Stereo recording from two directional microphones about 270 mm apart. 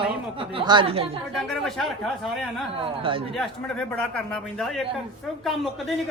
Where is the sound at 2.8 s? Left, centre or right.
Centre.